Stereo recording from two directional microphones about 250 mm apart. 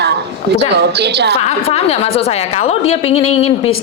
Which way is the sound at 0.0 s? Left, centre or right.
Right.